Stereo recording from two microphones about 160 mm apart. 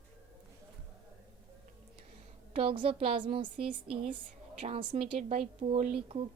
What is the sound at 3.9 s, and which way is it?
Speech, 5° right (ahead or behind).